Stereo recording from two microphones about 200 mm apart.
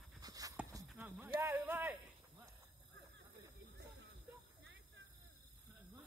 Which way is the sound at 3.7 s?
55° right (ahead or behind).